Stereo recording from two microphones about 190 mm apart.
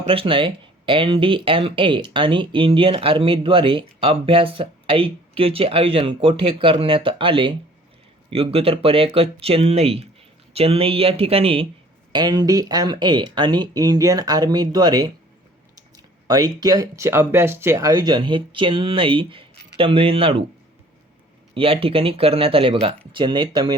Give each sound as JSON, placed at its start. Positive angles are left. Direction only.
{"t": 0.0, "sound": "speech", "side_deg": -30}
{"t": 21.5, "sound": "speech", "side_deg": -30}